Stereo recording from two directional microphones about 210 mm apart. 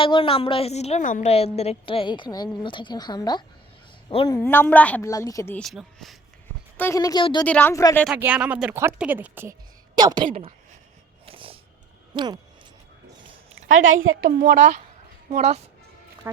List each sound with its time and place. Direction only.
0.0 s a woman's voice: 25° left (ahead or behind)
4.4 s a woman's voice: 10° left (ahead or behind)
6.7 s a woman's voice: 15° left (ahead or behind)
7.4 s a woman's voice: 10° left (ahead or behind)
8.0 s speech: 5° right (ahead or behind)
10.3 s a sound: 30° right (ahead or behind)
11.3 s dog: 25° right (ahead or behind)
12.1 s speech: 20° right (ahead or behind)
13.7 s a woman's voice: 70° right (ahead or behind)
14.3 s speech: 40° right (ahead or behind)
16.2 s speech: 15° right (ahead or behind)